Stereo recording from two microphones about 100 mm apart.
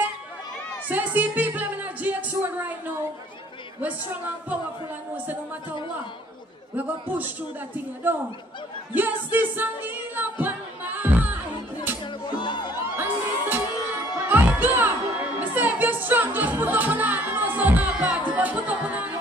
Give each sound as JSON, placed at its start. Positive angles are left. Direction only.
{"t": 0.8, "sound": "speech", "side_deg": -15}
{"t": 5.1, "sound": "speech", "side_deg": -15}
{"t": 6.8, "sound": "a man's voice", "side_deg": -20}
{"t": 8.9, "sound": "singing", "side_deg": -20}
{"t": 12.0, "sound": "music", "side_deg": 50}
{"t": 12.9, "sound": "music", "side_deg": -20}